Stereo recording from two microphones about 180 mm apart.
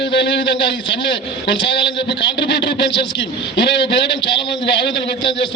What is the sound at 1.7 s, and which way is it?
Speech, 30° left (ahead or behind).